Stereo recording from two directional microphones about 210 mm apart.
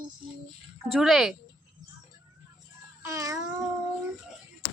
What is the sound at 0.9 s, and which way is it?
Speech, centre (ahead or behind).